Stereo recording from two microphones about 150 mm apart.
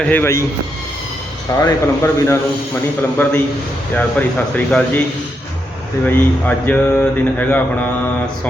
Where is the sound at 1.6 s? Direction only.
20° left (ahead or behind).